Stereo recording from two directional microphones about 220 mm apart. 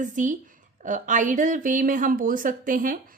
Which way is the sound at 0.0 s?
35° right (ahead or behind).